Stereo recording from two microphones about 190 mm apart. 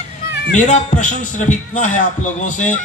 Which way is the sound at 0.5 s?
40° left (ahead or behind).